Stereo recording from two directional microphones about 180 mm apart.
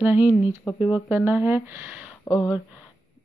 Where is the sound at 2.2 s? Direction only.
15° left (ahead or behind).